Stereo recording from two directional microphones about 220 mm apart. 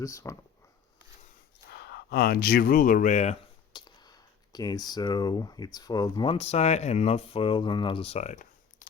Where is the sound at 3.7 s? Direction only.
20° left (ahead or behind); by 8.9 s 35° left (ahead or behind).